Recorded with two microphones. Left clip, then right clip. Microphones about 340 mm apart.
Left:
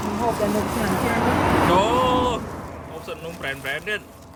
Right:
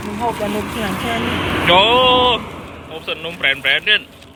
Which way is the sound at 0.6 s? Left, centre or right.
Left.